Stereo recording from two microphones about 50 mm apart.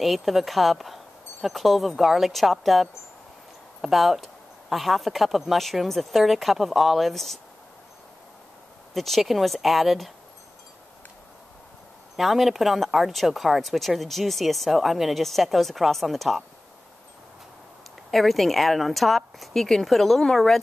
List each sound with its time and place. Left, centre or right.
0.0 s speech: centre
8.9 s speech: centre
12.2 s speech: centre
18.1 s speech: centre